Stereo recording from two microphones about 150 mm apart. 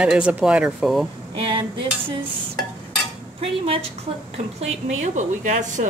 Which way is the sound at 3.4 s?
40° right (ahead or behind).